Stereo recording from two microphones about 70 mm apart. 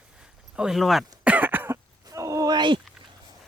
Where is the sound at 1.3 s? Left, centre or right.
Right.